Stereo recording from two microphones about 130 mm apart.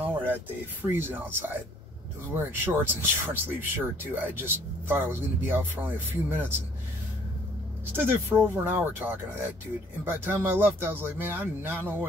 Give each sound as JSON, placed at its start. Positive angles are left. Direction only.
{"t": 0.8, "sound": "speech", "side_deg": -15}
{"t": 7.9, "sound": "speech", "side_deg": -15}